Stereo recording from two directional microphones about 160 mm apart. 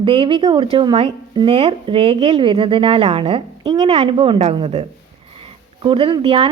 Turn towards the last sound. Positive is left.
turn(degrees=-40)  # may be behind; listen again after turning